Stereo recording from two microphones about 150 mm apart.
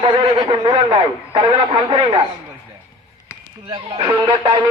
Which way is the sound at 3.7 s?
35° right (ahead or behind).